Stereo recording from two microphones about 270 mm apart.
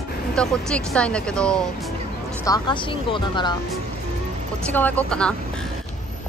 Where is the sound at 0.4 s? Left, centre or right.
Centre.